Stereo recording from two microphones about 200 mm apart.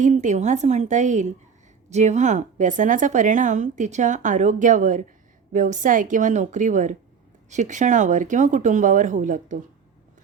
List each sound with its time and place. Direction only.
0.0 s a woman's voice: 35° right (ahead or behind)